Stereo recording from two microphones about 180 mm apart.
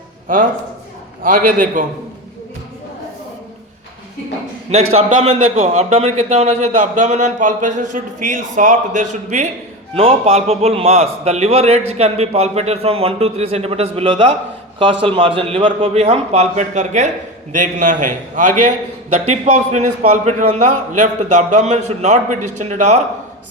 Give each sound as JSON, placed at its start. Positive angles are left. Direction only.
{"t": 0.3, "sound": "a man's voice", "side_deg": -50}
{"t": 4.7, "sound": "a man's voice", "side_deg": -35}
{"t": 9.9, "sound": "a man's voice", "side_deg": -30}